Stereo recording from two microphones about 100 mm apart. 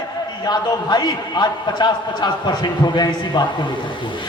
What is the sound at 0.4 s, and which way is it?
A man's voice, 45° left (ahead or behind).